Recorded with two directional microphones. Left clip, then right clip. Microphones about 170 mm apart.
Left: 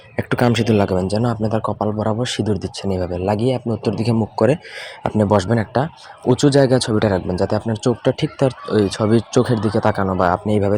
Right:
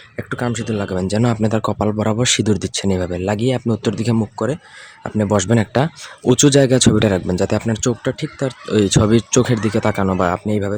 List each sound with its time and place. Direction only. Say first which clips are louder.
0.2 s speech: left 5 dB; 15° left (ahead or behind)
0.9 s speech: even; 10° right (ahead or behind)
4.4 s speech: left 5 dB; 5° left (ahead or behind)
5.1 s speech: left 2 dB; 5° right (ahead or behind)
5.7 s speech: right 2 dB; 25° right (ahead or behind)
8.0 s speech: left 4 dB; centre (ahead or behind)
8.6 s speech: right 2 dB; 20° right (ahead or behind)
10.0 s speech: left 1 dB; 30° right (ahead or behind)
10.4 s speech: left 3 dB; 5° right (ahead or behind)